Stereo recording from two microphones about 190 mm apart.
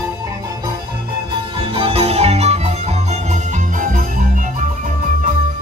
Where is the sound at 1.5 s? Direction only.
30° right (ahead or behind); by 4.2 s 45° right (ahead or behind).